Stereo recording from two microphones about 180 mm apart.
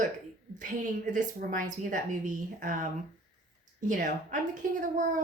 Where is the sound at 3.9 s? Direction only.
45° right (ahead or behind).